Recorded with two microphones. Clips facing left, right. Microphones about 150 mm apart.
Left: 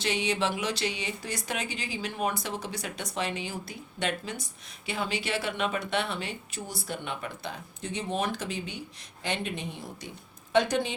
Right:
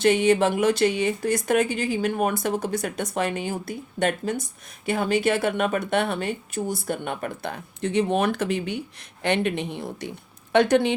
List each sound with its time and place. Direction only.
0.0 s a woman's voice: 50° right (ahead or behind)